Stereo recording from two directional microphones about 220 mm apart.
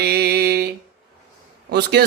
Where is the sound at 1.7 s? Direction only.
50° right (ahead or behind).